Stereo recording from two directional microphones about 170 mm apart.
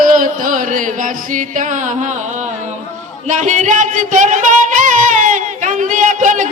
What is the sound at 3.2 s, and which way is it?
Music, 45° right (ahead or behind).